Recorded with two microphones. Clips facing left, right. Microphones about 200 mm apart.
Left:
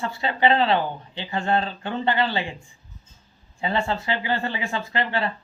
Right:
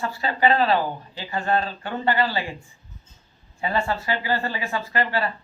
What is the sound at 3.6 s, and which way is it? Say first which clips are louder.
Speech: even; 20° left (ahead or behind).